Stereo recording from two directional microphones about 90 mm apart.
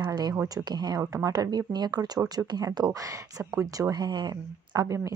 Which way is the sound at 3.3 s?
35° right (ahead or behind).